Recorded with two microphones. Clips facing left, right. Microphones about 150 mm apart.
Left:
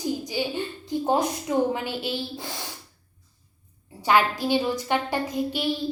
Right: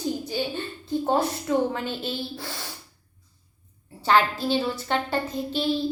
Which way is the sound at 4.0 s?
15° left (ahead or behind).